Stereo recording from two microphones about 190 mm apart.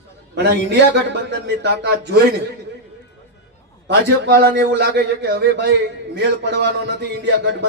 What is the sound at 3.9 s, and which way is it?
A man's voice, 65° right (ahead or behind).